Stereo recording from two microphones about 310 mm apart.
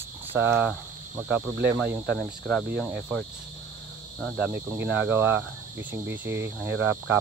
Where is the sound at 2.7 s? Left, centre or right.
Centre.